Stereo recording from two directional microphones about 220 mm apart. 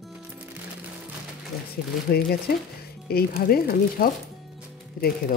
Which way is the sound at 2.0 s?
45° left (ahead or behind).